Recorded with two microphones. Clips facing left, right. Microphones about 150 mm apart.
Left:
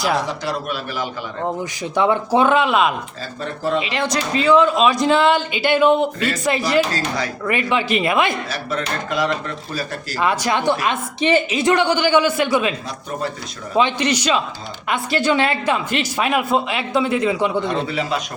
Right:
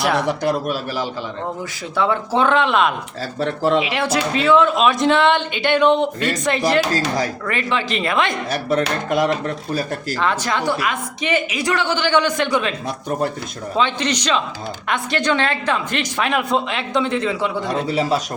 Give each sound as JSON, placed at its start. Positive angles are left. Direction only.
{"t": 0.2, "sound": "a man's voice", "side_deg": -60}
{"t": 2.0, "sound": "a woman's voice", "side_deg": 15}
{"t": 3.4, "sound": "speech", "side_deg": -90}
{"t": 3.8, "sound": "a woman's voice", "side_deg": -5}
{"t": 8.4, "sound": "speech", "side_deg": -55}
{"t": 10.2, "sound": "a woman's voice", "side_deg": 10}
{"t": 13.7, "sound": "a woman's voice", "side_deg": 10}
{"t": 17.7, "sound": "a man's voice", "side_deg": -40}